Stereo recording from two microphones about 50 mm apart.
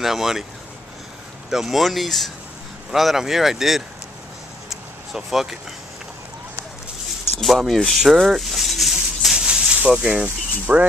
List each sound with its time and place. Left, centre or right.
0.0 s speech: centre
1.5 s speech: centre
4.6 s vehicle: centre
7.3 s speech: centre
8.1 s a sound: centre
9.8 s speech: right